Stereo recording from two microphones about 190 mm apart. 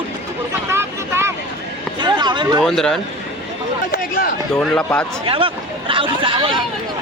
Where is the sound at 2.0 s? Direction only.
25° right (ahead or behind).